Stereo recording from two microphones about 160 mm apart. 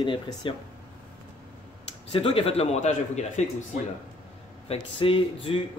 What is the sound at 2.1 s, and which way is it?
Speech, 35° left (ahead or behind).